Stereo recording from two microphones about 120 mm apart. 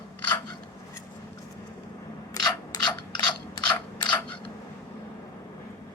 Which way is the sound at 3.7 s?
40° left (ahead or behind).